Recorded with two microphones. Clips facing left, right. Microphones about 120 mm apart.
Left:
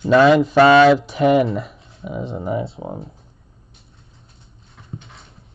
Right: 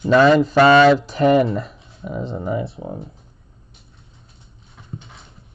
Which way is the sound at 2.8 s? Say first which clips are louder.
Left 1 dB; 45° left (ahead or behind).